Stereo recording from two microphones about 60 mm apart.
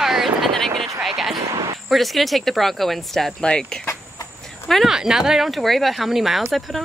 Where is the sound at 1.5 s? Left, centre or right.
Right.